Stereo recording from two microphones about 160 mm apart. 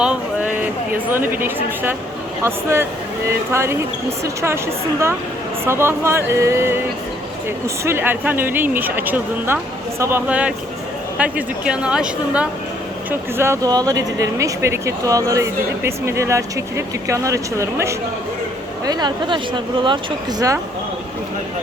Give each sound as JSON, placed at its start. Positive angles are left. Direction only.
{"t": 0.0, "sound": "a sound", "side_deg": -5}
{"t": 1.3, "sound": "speech", "side_deg": -15}
{"t": 7.9, "sound": "speech", "side_deg": -15}